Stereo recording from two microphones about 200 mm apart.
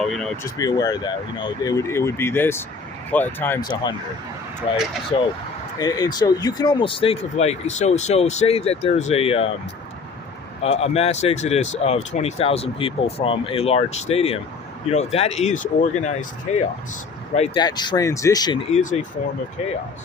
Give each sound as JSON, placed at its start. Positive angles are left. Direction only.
{"t": 0.0, "sound": "speech", "side_deg": 0}
{"t": 0.4, "sound": "speech", "side_deg": 20}
{"t": 5.8, "sound": "speech", "side_deg": 20}
{"t": 10.6, "sound": "speech", "side_deg": 30}
{"t": 17.6, "sound": "speech", "side_deg": 20}
{"t": 18.7, "sound": "speech", "side_deg": 35}